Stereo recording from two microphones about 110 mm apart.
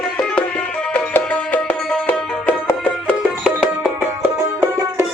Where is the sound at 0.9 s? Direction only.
15° left (ahead or behind).